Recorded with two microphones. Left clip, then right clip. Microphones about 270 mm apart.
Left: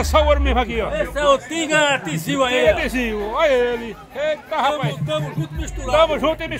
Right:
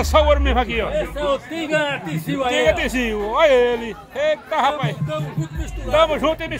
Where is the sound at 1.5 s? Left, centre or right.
Left.